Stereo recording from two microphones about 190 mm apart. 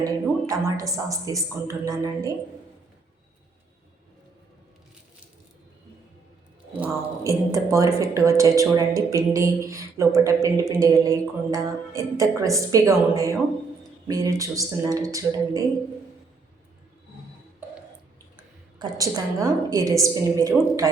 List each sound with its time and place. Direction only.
0.0 s speech: 20° right (ahead or behind)
6.7 s speech: 10° right (ahead or behind)
18.8 s speech: 20° right (ahead or behind)